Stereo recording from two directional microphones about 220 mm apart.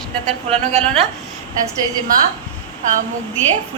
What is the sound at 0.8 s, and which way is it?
Speech, 5° left (ahead or behind).